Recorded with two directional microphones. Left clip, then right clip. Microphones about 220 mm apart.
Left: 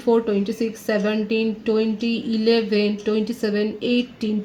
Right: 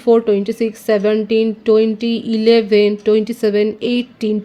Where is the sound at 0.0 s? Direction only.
45° right (ahead or behind).